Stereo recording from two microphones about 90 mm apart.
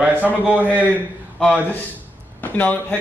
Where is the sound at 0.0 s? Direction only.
15° right (ahead or behind).